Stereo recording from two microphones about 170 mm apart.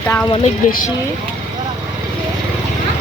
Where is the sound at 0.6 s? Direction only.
50° left (ahead or behind).